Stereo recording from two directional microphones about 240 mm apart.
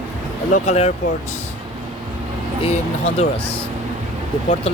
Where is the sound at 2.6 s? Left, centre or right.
Left.